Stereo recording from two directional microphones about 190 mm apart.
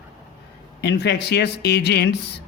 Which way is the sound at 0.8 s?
60° left (ahead or behind).